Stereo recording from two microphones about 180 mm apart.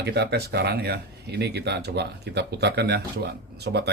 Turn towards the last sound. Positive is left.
turn(degrees=-65)  # may be behind; listen again after turning